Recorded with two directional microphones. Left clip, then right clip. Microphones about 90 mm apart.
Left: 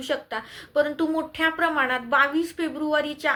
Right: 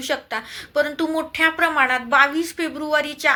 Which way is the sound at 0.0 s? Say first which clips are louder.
Right 3 dB; 35° left (ahead or behind).